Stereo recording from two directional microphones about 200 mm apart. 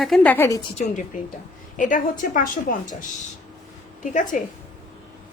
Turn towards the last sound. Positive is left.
turn(degrees=40)  # may be behind; listen again after turning